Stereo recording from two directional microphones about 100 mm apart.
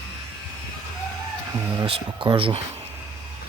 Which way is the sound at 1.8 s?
45° right (ahead or behind).